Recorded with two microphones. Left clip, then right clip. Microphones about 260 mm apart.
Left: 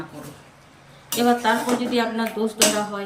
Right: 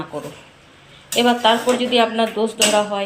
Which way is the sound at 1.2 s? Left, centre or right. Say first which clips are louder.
Right 4 dB; centre.